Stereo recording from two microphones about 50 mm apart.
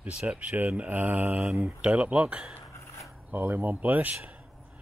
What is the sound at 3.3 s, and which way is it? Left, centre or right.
Speech, right.